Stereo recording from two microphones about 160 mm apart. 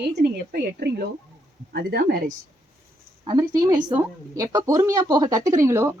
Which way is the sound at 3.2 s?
30° right (ahead or behind).